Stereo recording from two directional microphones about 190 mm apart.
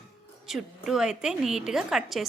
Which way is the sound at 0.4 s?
Centre (ahead or behind).